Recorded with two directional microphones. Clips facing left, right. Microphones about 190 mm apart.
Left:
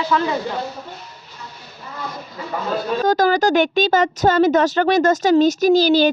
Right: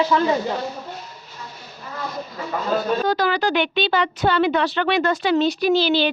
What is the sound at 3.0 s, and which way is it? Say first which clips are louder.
A woman's voice: left 4 dB; 45° left (ahead or behind).